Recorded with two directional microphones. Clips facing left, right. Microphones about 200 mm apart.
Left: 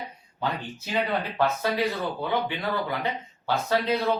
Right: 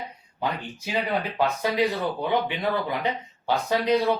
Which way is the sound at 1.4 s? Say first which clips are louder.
Right 2 dB; 15° right (ahead or behind).